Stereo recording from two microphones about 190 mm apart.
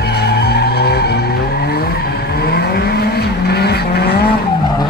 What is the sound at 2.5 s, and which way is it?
Vehicle, 55° left (ahead or behind).